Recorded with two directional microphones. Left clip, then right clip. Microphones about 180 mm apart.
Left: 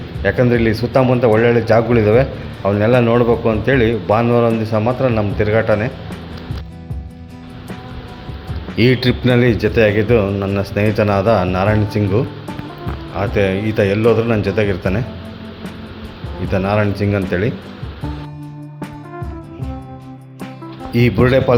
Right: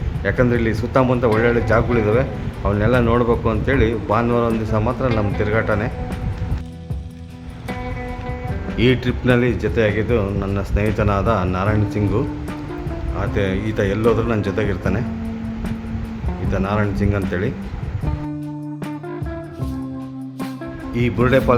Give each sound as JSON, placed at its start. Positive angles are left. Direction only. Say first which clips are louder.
{"t": 0.2, "sound": "speech", "louder": "left 4 dB", "side_deg": 10}
{"t": 8.8, "sound": "speech", "louder": "left 4 dB", "side_deg": 15}
{"t": 16.5, "sound": "speech", "louder": "left 5 dB", "side_deg": 5}
{"t": 20.9, "sound": "speech", "louder": "left 4 dB", "side_deg": 15}